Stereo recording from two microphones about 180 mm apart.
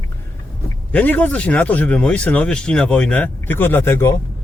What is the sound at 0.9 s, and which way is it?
Speech, 10° left (ahead or behind).